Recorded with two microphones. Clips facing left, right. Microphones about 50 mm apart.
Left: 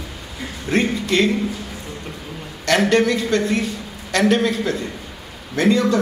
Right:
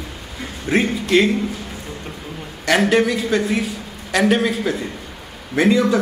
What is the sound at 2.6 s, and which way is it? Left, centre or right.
A man's voice, centre.